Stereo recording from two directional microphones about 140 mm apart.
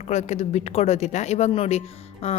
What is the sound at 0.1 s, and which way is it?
A woman's voice, 55° left (ahead or behind).